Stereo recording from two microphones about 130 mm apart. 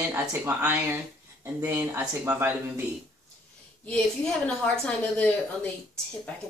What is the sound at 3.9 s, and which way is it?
A woman's voice, 10° left (ahead or behind).